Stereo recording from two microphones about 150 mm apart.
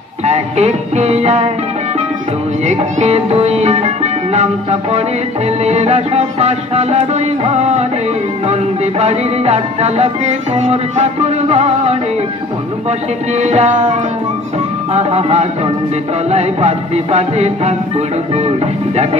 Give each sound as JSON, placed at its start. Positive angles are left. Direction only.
{"t": 0.2, "sound": "music", "side_deg": -45}
{"t": 2.6, "sound": "music", "side_deg": -50}
{"t": 9.0, "sound": "music", "side_deg": -45}
{"t": 13.4, "sound": "music", "side_deg": -45}
{"t": 15.0, "sound": "music", "side_deg": -45}